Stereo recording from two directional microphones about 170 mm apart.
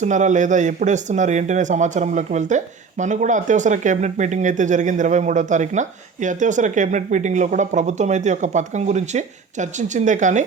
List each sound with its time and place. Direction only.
0.0 s speech: 45° right (ahead or behind)